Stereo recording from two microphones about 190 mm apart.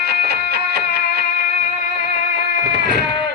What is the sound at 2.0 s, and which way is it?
Music, 65° right (ahead or behind).